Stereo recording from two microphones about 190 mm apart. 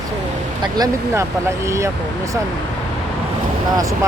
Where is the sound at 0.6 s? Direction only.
20° right (ahead or behind).